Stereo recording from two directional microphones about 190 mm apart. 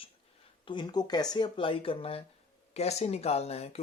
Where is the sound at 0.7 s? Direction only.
25° left (ahead or behind).